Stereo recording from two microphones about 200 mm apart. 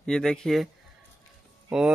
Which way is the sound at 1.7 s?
5° right (ahead or behind).